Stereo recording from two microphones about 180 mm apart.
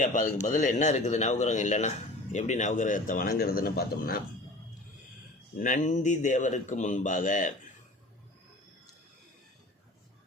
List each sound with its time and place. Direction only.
0.0 s a man's voice: 45° left (ahead or behind)
5.5 s a man's voice: 45° left (ahead or behind)